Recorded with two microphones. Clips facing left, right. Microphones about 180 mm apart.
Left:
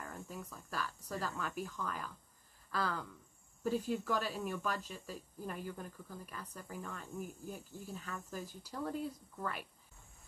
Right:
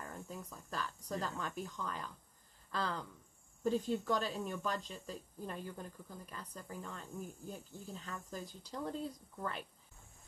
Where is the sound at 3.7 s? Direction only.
10° left (ahead or behind).